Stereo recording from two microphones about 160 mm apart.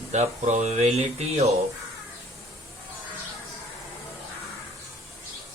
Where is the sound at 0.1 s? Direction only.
45° right (ahead or behind).